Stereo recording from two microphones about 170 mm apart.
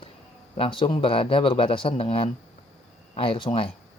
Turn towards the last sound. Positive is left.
turn(degrees=30)  # may be behind; listen again after turning